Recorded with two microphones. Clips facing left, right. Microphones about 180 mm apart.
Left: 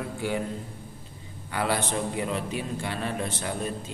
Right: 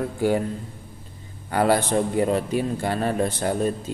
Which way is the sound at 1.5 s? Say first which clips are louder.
Right 8 dB; 45° right (ahead or behind).